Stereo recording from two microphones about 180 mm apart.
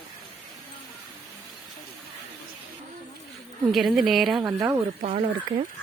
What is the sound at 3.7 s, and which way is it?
Speech, centre (ahead or behind).